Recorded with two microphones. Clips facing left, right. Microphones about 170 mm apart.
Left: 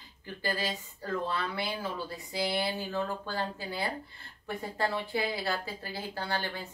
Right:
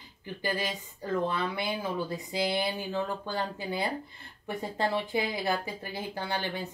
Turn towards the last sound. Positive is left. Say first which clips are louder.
# right 2 dB
turn(degrees=-20)  # may be behind; listen again after turning